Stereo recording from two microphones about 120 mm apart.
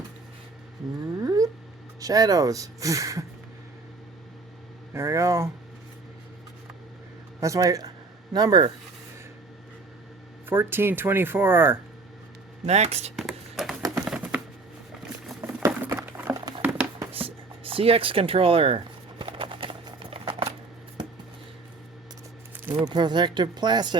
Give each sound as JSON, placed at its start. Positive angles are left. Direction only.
{"t": 1.2, "sound": "a sound", "side_deg": -30}
{"t": 2.0, "sound": "speech", "side_deg": -30}
{"t": 4.9, "sound": "speech", "side_deg": -25}
{"t": 7.3, "sound": "speech", "side_deg": -25}
{"t": 10.4, "sound": "speech", "side_deg": -20}
{"t": 12.6, "sound": "speech", "side_deg": -65}
{"t": 13.1, "sound": "a sound", "side_deg": 0}
{"t": 15.8, "sound": "a sound", "side_deg": -15}
{"t": 16.6, "sound": "music", "side_deg": -15}
{"t": 17.2, "sound": "speech", "side_deg": -50}
{"t": 19.2, "sound": "a sound", "side_deg": -45}
{"t": 22.9, "sound": "speech", "side_deg": -40}